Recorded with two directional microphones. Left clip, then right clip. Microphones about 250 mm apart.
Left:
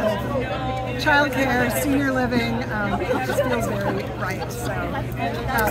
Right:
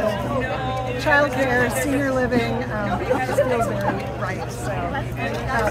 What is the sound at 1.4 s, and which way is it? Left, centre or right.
A woman's voice, centre.